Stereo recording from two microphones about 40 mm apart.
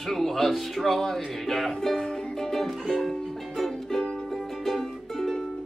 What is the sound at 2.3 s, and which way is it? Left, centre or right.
Music, centre.